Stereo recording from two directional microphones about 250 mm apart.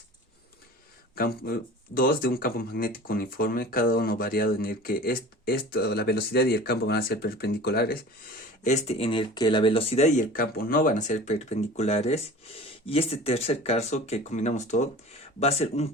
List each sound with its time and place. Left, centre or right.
1.1 s speech: left
8.6 s speech: left